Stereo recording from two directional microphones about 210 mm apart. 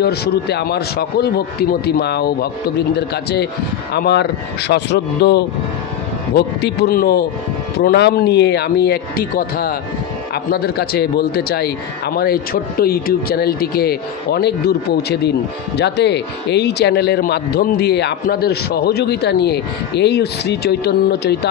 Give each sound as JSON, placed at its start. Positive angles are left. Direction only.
{"t": 0.0, "sound": "speech", "side_deg": 50}